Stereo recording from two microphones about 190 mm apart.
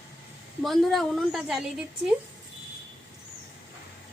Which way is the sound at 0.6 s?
Centre (ahead or behind).